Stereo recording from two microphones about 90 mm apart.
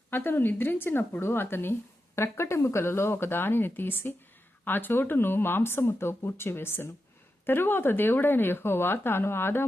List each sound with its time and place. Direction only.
0.1 s speech: 25° left (ahead or behind)